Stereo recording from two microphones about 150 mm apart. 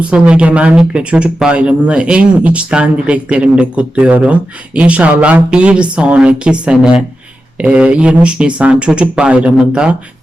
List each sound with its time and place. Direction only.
0.1 s speech: 10° right (ahead or behind)